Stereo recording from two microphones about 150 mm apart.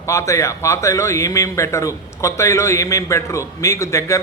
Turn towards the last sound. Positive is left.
turn(degrees=20)  # may be behind; listen again after turning